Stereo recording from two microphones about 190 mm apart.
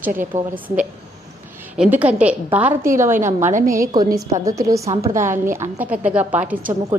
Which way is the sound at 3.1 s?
40° right (ahead or behind).